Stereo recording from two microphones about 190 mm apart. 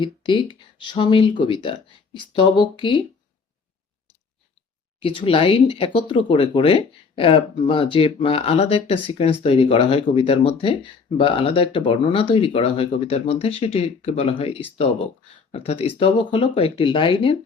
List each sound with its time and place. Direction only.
0.0 s speech: 25° left (ahead or behind)
4.9 s speech: 30° left (ahead or behind)